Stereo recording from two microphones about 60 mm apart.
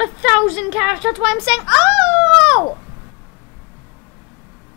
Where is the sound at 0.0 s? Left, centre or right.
Centre.